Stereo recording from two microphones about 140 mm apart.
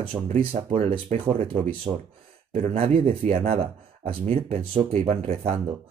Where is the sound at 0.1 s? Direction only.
20° right (ahead or behind).